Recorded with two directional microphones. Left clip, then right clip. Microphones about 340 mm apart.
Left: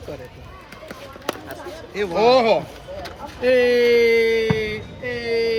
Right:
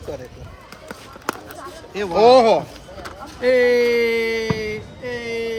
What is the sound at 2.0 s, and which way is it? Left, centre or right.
Speech, right.